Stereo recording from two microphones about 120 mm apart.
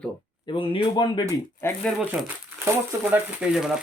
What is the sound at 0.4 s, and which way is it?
Speech, 45° left (ahead or behind).